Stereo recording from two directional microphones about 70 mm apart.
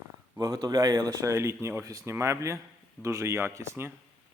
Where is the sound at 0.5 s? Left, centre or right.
Right.